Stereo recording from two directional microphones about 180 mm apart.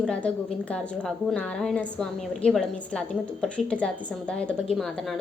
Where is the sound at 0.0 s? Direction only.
5° left (ahead or behind).